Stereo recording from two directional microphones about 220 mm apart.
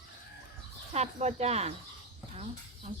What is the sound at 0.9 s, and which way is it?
Speech, 30° right (ahead or behind).